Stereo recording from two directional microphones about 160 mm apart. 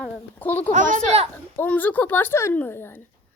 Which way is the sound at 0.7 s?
50° right (ahead or behind).